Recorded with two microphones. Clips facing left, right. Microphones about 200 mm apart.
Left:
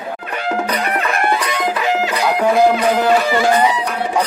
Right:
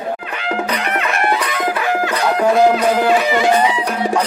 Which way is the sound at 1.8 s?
15° left (ahead or behind).